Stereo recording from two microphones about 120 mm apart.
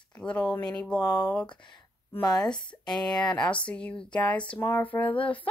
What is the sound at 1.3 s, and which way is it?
Speech, 10° left (ahead or behind).